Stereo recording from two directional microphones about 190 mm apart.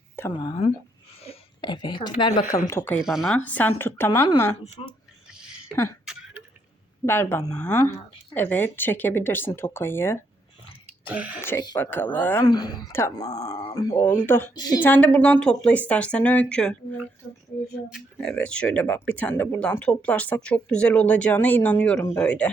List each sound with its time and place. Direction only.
0.3 s a woman's voice: 25° left (ahead or behind)
2.6 s speech: 10° left (ahead or behind)
3.0 s speech: centre (ahead or behind); by 4.5 s 15° left (ahead or behind)
4.8 s speech: 30° left (ahead or behind)
7.0 s speech: 10° left (ahead or behind)
11.0 s speech: 10° right (ahead or behind)
11.4 s speech: 20° left (ahead or behind)
14.8 s speech: 10° left (ahead or behind)
17.8 s speech: centre (ahead or behind)